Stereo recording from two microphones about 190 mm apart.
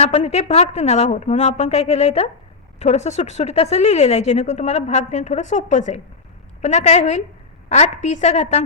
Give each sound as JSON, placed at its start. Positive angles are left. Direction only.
{"t": 0.0, "sound": "speech", "side_deg": 35}